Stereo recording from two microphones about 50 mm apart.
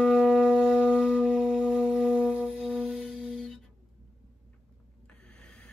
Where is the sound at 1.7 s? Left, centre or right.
Centre.